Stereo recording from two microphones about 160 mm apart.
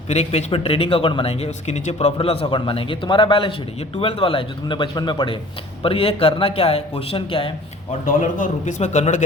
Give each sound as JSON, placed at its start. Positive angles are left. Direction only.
{"t": 0.1, "sound": "speech", "side_deg": 45}
{"t": 8.0, "sound": "a man's voice", "side_deg": 55}